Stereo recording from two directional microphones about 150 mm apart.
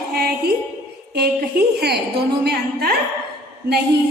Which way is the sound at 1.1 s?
90° right.